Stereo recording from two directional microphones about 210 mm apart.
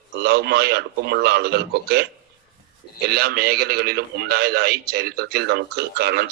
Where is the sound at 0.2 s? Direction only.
50° right (ahead or behind).